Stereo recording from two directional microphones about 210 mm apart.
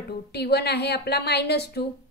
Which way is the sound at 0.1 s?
50° left (ahead or behind).